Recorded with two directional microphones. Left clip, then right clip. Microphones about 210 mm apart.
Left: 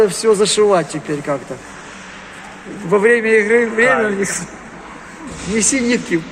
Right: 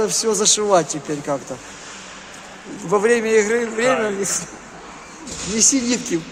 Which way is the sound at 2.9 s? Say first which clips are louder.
Left 4 dB; 15° right (ahead or behind).